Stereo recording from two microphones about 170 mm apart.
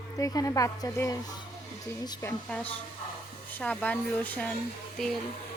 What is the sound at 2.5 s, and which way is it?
Speech, 10° left (ahead or behind).